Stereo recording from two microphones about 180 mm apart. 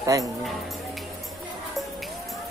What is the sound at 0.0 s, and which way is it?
Speech, 20° right (ahead or behind).